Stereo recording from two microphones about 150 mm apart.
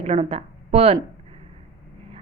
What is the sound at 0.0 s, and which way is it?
Speech, 40° right (ahead or behind).